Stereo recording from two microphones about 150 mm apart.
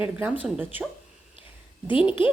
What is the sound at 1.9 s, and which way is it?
Speech, 35° left (ahead or behind).